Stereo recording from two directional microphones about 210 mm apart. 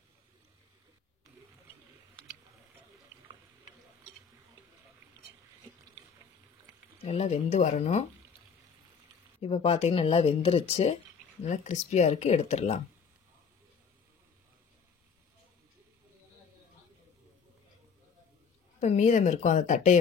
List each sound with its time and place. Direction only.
7.1 s speech: 30° left (ahead or behind)
9.4 s speech: 30° left (ahead or behind)
18.8 s speech: 35° left (ahead or behind)